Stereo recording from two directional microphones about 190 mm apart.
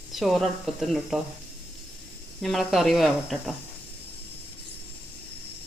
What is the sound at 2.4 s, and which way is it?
Speech, centre (ahead or behind).